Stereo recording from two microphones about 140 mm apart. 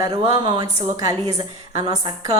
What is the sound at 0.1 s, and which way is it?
A woman's voice, 45° right (ahead or behind).